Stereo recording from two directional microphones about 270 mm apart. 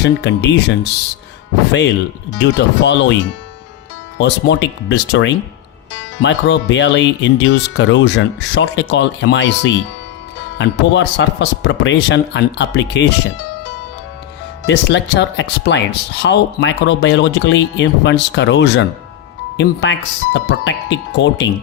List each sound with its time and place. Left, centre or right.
0.0 s speech: left
2.4 s speech: left
4.2 s speech: left
14.7 s speech: left